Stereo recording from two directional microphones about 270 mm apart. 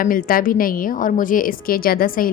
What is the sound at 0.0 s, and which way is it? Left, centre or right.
A woman's voice, left.